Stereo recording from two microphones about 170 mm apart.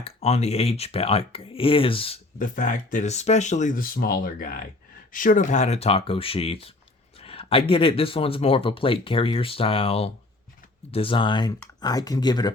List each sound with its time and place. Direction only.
0.0 s speech: 40° left (ahead or behind)
2.4 s speech: 50° left (ahead or behind); by 12.5 s 25° left (ahead or behind)